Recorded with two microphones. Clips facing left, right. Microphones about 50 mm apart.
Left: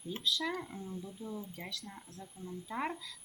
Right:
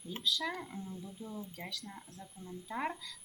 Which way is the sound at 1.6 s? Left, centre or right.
Centre.